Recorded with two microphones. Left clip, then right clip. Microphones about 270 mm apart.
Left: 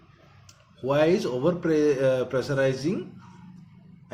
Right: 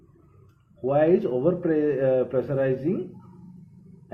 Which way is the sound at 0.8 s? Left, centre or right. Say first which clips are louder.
Right 2 dB; left.